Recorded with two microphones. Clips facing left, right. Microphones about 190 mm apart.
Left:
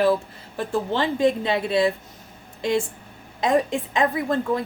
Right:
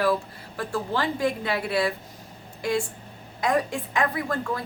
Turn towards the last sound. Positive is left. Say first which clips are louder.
# left 5 dB
turn(degrees=20)  # may be behind; listen again after turning